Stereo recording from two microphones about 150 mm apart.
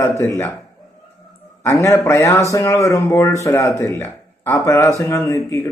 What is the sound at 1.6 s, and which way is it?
A man's voice, 20° left (ahead or behind).